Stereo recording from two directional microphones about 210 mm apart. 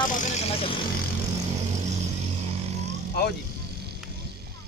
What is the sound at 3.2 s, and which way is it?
Speech, 50° left (ahead or behind).